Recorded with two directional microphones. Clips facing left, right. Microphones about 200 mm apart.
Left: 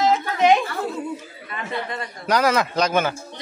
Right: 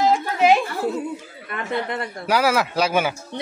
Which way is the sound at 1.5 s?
60° right (ahead or behind).